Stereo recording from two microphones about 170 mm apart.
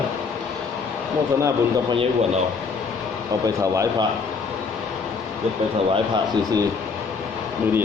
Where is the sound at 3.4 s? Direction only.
20° right (ahead or behind).